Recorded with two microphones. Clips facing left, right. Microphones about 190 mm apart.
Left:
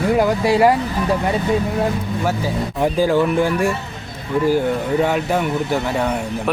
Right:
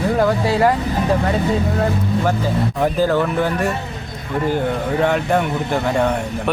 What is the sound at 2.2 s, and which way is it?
Speech, 10° left (ahead or behind).